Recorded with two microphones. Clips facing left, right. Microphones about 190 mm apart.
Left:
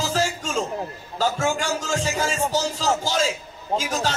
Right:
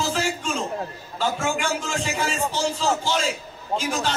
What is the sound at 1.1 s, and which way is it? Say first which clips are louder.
A man's voice: left 2 dB; 40° left (ahead or behind).